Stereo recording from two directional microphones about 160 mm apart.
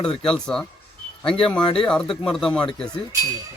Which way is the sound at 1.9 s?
5° left (ahead or behind).